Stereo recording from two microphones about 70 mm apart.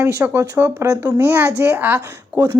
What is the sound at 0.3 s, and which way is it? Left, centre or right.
Speech, right.